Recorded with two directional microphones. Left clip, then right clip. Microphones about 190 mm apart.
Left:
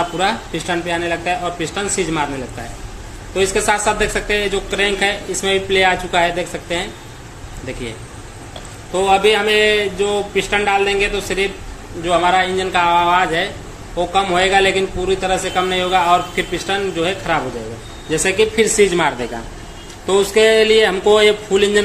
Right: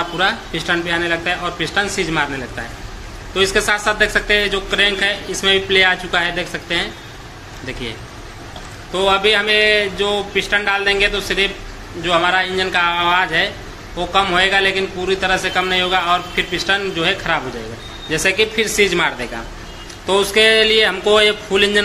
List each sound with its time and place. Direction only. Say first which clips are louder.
0.2 s a man's voice: right 1 dB; 10° left (ahead or behind)
3.3 s a man's voice: even; 10° left (ahead or behind)
8.9 s a man's voice: left 1 dB; 10° left (ahead or behind)